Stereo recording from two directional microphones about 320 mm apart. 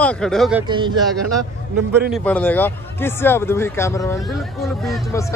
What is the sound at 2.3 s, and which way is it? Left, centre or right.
Speech, centre.